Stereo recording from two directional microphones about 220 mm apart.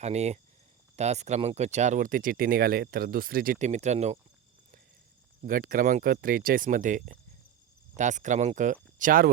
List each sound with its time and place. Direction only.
0.0 s speech: 30° right (ahead or behind)
5.5 s speech: 40° right (ahead or behind)